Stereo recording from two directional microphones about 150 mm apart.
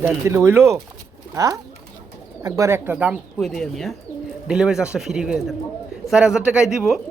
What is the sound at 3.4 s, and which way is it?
Speech, centre (ahead or behind).